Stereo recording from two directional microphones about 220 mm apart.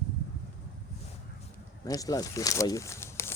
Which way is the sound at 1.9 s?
15° left (ahead or behind).